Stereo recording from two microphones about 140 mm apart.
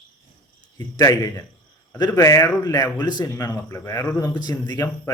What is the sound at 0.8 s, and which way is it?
A man's voice, 25° left (ahead or behind).